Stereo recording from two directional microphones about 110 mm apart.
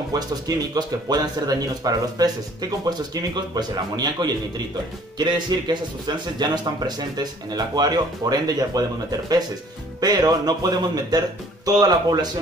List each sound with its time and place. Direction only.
0.1 s speech: 35° right (ahead or behind)
3.5 s speech: 40° right (ahead or behind)
9.9 s speech: 35° right (ahead or behind)